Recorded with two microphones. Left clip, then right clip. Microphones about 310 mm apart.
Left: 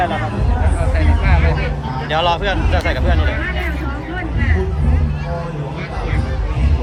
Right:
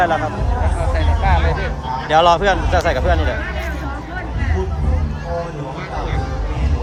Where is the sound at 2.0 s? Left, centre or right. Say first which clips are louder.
Right 4 dB; right.